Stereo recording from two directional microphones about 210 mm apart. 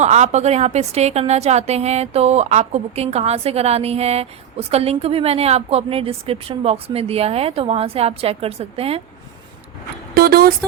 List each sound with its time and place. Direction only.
0.0 s a woman's voice: 30° right (ahead or behind)
10.2 s speech: 45° right (ahead or behind)